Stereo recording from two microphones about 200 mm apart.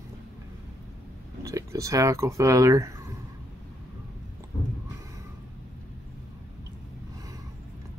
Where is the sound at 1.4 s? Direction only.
15° right (ahead or behind).